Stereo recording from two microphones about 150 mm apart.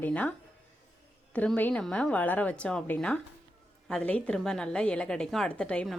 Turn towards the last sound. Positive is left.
turn(degrees=5)  # may be behind; listen again after turning